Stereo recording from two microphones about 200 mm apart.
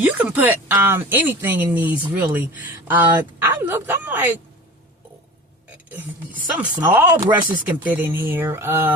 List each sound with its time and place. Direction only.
0.0 s speech: 10° right (ahead or behind)
5.9 s speech: 5° right (ahead or behind)